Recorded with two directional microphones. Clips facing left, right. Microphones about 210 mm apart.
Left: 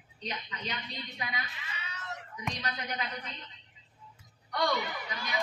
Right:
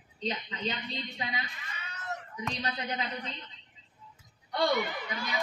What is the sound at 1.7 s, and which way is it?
Screaming, 50° right (ahead or behind).